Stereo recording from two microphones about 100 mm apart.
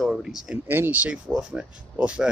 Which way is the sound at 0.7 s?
20° right (ahead or behind).